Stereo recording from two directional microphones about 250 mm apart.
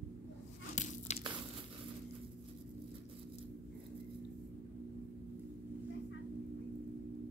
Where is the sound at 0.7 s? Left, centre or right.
Left.